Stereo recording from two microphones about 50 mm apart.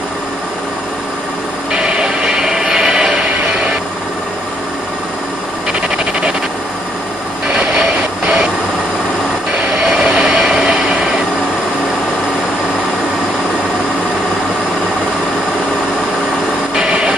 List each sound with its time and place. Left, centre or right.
1.7 s music: centre
9.8 s vehicle: centre
16.7 s a sound: centre